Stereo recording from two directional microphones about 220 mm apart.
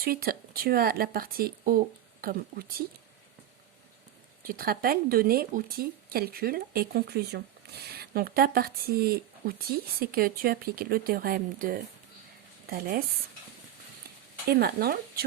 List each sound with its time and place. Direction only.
0.0 s speech: 40° right (ahead or behind)
4.4 s speech: 40° right (ahead or behind)
14.4 s speech: 45° right (ahead or behind)